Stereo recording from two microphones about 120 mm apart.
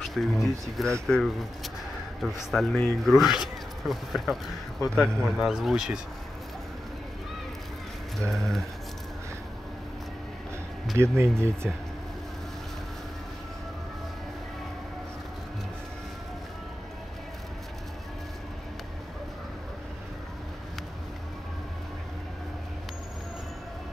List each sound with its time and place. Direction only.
0.0 s speech: centre (ahead or behind)
8.2 s speech: centre (ahead or behind)
11.0 s speech: 20° right (ahead or behind)